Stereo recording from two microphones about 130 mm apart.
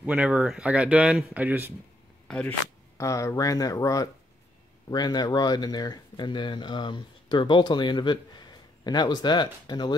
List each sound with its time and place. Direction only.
0.0 s speech: 10° right (ahead or behind)
2.2 s speech: 10° left (ahead or behind)
3.0 s speech: 25° left (ahead or behind)